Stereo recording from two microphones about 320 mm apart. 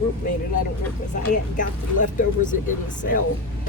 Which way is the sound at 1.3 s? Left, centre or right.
Left.